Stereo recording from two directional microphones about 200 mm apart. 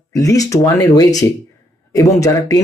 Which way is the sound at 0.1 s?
15° left (ahead or behind).